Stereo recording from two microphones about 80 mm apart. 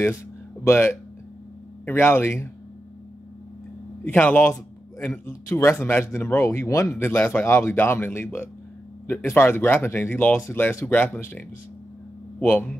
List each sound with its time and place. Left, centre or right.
0.7 s speech: left
4.0 s speech: left
5.2 s speech: left; by 12.7 s centre